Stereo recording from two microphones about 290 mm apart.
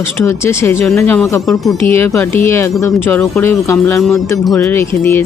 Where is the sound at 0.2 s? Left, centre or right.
Centre.